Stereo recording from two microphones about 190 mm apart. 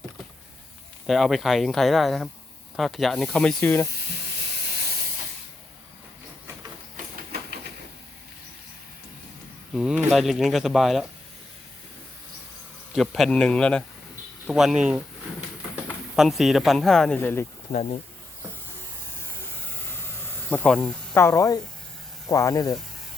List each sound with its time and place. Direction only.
1.0 s speech: centre (ahead or behind)
9.7 s speech: 5° right (ahead or behind)
12.9 s speech: centre (ahead or behind)
17.7 s speech: 35° left (ahead or behind)
20.2 s speech: 5° left (ahead or behind)